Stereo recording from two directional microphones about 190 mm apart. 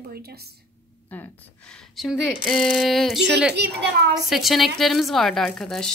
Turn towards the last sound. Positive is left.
turn(degrees=5)  # may be behind; listen again after turning